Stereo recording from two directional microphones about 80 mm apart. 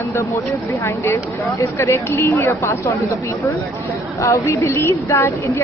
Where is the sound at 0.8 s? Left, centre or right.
Left.